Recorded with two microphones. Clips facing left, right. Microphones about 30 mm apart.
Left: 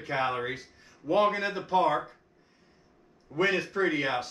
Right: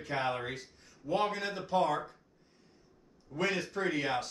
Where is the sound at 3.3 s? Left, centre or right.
Centre.